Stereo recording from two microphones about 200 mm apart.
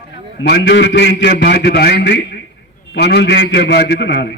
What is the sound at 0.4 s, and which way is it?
A man's voice, 55° left (ahead or behind).